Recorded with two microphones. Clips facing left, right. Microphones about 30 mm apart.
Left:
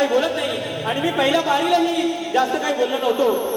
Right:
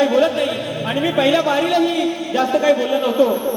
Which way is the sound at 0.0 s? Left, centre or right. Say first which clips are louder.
Right 4 dB; right.